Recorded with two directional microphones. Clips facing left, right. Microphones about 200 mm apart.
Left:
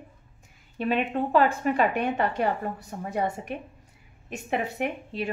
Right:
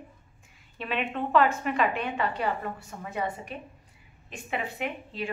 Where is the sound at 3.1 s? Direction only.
50° left (ahead or behind).